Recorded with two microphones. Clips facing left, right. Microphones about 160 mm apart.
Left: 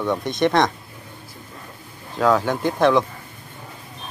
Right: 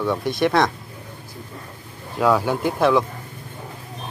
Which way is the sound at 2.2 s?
10° right (ahead or behind).